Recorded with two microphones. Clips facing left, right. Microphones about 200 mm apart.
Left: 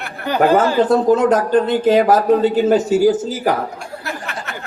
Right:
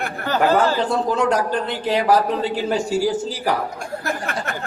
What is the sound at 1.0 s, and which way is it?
A man's voice, 50° left (ahead or behind).